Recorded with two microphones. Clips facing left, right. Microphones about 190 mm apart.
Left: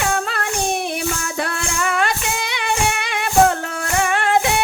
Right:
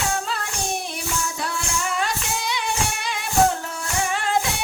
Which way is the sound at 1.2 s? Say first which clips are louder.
Left 4 dB; 65° left (ahead or behind).